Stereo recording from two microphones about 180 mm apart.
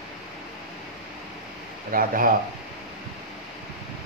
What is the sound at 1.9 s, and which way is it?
Speech, 50° right (ahead or behind).